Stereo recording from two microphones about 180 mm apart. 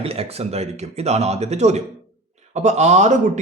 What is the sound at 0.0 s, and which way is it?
A man's voice, 35° right (ahead or behind).